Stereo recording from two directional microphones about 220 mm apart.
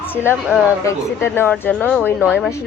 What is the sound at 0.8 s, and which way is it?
A woman's voice, 10° left (ahead or behind).